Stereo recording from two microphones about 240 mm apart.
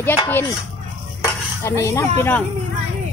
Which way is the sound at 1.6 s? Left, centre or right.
Centre.